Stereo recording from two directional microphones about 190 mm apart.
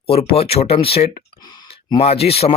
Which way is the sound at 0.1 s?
30° left (ahead or behind).